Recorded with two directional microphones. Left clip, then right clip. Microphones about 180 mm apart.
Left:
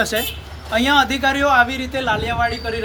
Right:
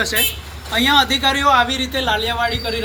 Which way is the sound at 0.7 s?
45° left (ahead or behind).